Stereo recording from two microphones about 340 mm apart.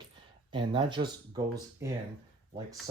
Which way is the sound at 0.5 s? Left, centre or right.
Centre.